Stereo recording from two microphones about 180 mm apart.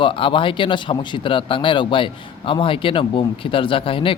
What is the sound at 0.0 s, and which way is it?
Speech, 30° left (ahead or behind).